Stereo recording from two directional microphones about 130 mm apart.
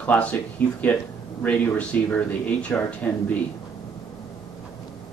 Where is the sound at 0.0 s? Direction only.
10° left (ahead or behind).